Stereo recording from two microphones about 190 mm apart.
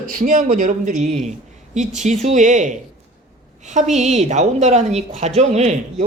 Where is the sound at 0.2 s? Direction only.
45° right (ahead or behind).